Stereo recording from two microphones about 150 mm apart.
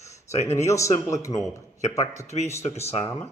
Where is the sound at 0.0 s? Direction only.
20° left (ahead or behind).